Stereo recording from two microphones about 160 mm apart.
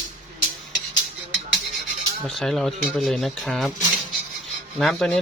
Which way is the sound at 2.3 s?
Centre (ahead or behind).